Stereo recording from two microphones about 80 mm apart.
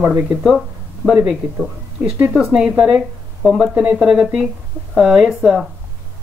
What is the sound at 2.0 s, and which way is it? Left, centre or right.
Speech, right.